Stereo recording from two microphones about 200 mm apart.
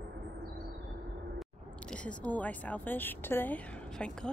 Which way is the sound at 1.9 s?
5° left (ahead or behind).